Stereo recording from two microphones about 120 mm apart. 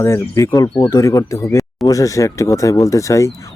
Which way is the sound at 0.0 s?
25° left (ahead or behind).